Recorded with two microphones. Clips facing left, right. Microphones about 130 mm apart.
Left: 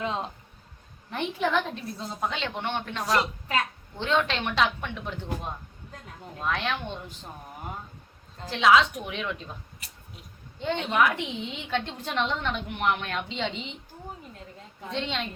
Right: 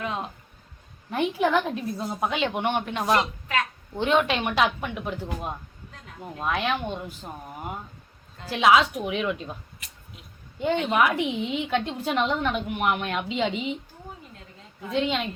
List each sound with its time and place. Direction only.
0.0 s speech: 25° left (ahead or behind)
1.1 s a woman's voice: 10° right (ahead or behind)
8.4 s a woman's voice: 10° right (ahead or behind)
10.9 s a woman's voice: 10° right (ahead or behind)
14.8 s a woman's voice: 5° right (ahead or behind)